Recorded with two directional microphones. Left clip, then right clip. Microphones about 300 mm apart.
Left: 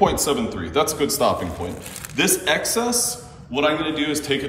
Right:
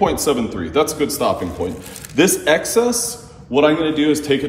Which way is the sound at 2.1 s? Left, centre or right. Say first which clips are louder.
Right 5 dB; centre.